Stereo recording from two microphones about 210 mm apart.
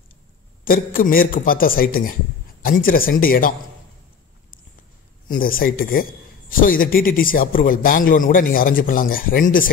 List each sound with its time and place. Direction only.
0.7 s a man's voice: 40° left (ahead or behind)
5.3 s a man's voice: 45° left (ahead or behind)